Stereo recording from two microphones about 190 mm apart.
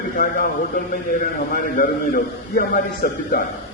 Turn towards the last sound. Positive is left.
turn(degrees=50)  # may be behind; listen again after turning